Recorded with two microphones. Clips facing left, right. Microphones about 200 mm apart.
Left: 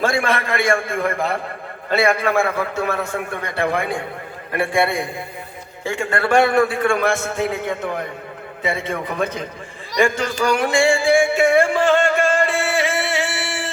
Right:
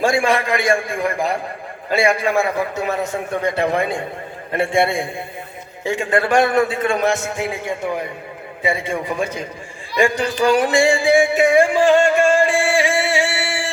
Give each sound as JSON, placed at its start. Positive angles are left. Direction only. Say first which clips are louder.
{"t": 0.0, "sound": "a man's voice", "louder": "right 3 dB", "side_deg": -15}
{"t": 10.4, "sound": "music", "louder": "right 2 dB", "side_deg": -15}